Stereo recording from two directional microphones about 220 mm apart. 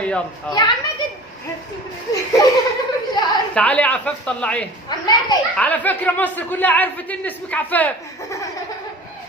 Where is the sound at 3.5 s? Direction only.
5° left (ahead or behind).